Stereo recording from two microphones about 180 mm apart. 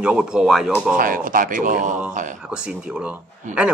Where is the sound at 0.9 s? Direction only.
50° right (ahead or behind).